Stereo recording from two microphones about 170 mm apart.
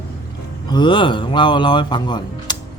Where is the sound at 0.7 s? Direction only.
25° left (ahead or behind).